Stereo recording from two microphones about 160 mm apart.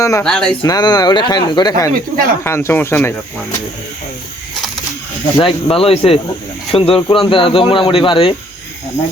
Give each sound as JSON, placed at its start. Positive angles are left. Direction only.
{"t": 0.2, "sound": "speech", "side_deg": 5}
{"t": 0.6, "sound": "speech", "side_deg": 25}
{"t": 1.9, "sound": "speech", "side_deg": -60}
{"t": 2.4, "sound": "speech", "side_deg": 15}
{"t": 5.4, "sound": "speech", "side_deg": 35}